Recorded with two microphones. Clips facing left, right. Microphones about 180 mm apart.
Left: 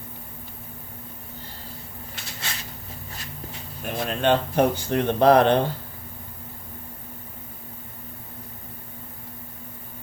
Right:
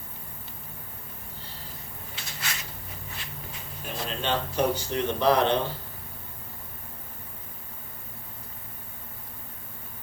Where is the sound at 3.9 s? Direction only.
55° left (ahead or behind).